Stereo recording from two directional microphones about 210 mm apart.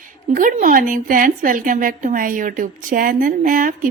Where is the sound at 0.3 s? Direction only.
40° right (ahead or behind).